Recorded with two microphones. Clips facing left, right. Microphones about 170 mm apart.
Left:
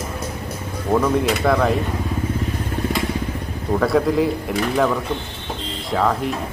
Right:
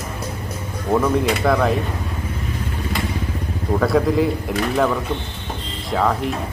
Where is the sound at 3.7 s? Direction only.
Centre (ahead or behind).